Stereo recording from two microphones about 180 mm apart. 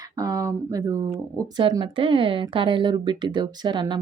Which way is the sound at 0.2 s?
20° right (ahead or behind).